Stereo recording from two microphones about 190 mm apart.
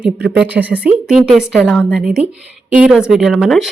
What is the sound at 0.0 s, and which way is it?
A woman's voice, 5° right (ahead or behind).